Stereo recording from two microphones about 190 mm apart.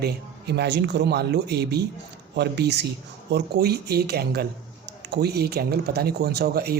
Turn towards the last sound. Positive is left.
turn(degrees=-55)  # may be behind; listen again after turning